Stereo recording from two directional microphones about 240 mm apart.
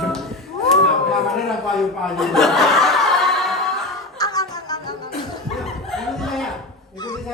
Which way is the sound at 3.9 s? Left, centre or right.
Centre.